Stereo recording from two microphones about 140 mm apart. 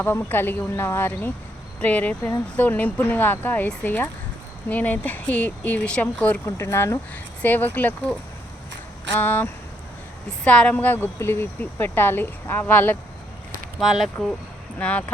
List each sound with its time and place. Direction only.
0.0 s speech: 15° left (ahead or behind)
9.1 s speech: 15° left (ahead or behind)
13.7 s speech: centre (ahead or behind)